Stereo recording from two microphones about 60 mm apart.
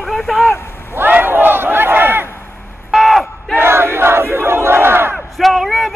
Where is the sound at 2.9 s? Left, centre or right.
Centre.